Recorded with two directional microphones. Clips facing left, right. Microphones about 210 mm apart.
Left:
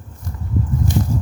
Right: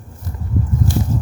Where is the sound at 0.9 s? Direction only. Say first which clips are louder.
Left 1 dB; 20° left (ahead or behind).